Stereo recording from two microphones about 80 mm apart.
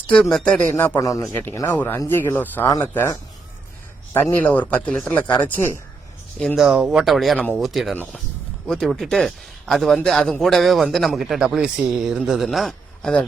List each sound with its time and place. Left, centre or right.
0.1 s speech: centre
0.7 s a man's voice: left
0.9 s speech: left
1.3 s a man's voice: left
4.1 s a man's voice: left
6.6 s speech: centre
7.0 s speech: centre
13.0 s speech: centre